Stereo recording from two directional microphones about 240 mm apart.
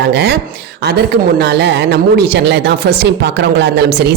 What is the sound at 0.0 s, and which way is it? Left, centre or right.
Speech, right.